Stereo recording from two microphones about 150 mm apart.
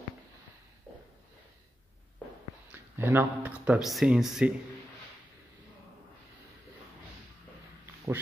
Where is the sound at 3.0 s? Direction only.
15° right (ahead or behind).